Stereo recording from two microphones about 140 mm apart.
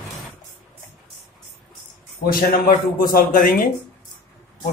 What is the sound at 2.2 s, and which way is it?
Speech, 90° left.